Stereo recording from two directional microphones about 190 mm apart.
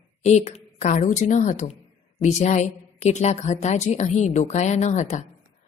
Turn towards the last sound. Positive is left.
turn(degrees=40)  # may be behind; listen again after turning